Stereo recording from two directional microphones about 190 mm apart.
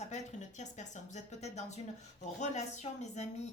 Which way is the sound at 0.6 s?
40° left (ahead or behind).